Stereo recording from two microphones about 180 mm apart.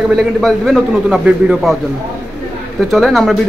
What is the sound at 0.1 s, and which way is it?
A man's voice, centre (ahead or behind).